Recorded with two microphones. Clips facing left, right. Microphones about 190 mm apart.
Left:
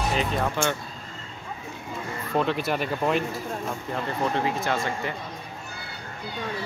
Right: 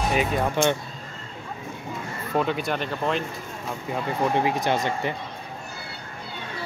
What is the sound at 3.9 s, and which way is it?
Speech, 15° right (ahead or behind).